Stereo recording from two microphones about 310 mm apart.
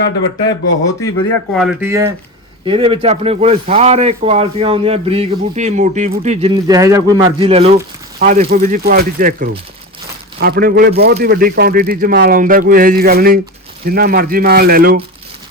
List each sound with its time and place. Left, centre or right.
1.3 s speech: centre; by 15.0 s right